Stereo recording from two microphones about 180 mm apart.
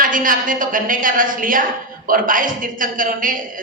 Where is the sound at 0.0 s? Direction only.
50° right (ahead or behind).